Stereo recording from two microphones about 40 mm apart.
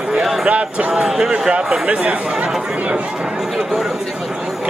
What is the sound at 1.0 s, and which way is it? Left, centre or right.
Speech, centre.